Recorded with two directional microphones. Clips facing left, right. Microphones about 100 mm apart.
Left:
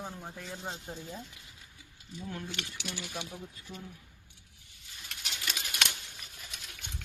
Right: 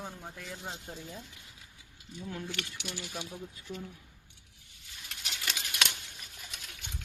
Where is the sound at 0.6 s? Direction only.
25° left (ahead or behind).